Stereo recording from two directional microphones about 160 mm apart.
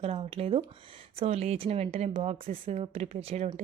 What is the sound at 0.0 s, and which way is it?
Speech, 35° right (ahead or behind).